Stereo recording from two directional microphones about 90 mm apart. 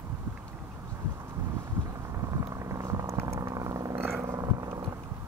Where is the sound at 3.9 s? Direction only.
25° right (ahead or behind).